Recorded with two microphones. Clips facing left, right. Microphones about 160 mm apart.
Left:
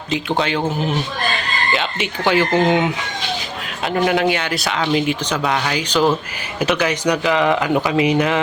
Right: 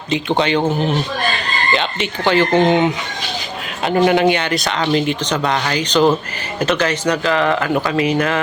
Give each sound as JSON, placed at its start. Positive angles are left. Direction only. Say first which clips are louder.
{"t": 0.1, "sound": "speech", "louder": "right 3 dB", "side_deg": 0}